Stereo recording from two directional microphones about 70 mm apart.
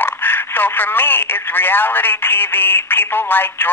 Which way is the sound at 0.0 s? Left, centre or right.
Left.